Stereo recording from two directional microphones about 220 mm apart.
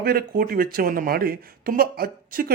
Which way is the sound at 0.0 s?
45° right (ahead or behind).